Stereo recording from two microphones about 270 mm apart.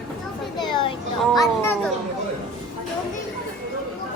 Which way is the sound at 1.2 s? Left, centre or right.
Centre.